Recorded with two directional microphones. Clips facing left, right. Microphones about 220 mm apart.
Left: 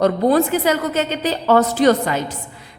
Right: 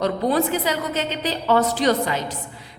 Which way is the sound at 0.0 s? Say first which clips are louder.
Left 5 dB; 50° left (ahead or behind).